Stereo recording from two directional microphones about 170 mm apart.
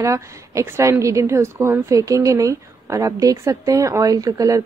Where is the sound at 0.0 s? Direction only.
20° right (ahead or behind).